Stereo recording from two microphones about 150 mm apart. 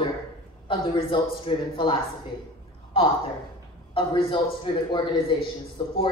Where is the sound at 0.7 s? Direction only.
35° left (ahead or behind).